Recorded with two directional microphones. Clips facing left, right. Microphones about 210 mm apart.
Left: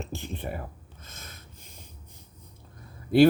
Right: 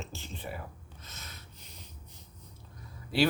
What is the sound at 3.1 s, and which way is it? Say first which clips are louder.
Speech: left 10 dB; 55° left (ahead or behind).